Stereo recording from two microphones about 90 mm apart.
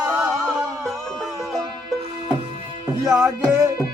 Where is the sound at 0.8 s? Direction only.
5° left (ahead or behind).